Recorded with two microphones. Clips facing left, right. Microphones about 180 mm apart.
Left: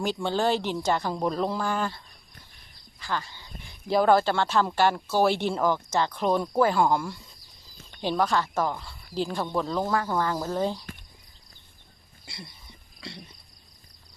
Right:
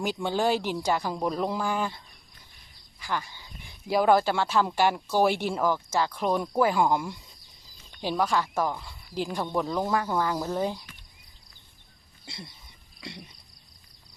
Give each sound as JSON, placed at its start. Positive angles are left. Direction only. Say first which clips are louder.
{"t": 0.0, "sound": "speech", "louder": "left 1 dB", "side_deg": -10}
{"t": 3.0, "sound": "speech", "louder": "even", "side_deg": -15}
{"t": 12.2, "sound": "a sound", "louder": "right 1 dB", "side_deg": -20}